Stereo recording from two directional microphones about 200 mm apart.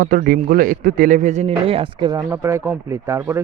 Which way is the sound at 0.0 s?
45° right (ahead or behind).